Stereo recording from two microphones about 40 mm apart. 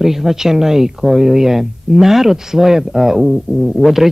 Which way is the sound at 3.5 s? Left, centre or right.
Right.